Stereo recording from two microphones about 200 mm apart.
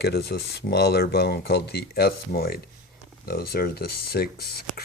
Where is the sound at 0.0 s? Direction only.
55° left (ahead or behind).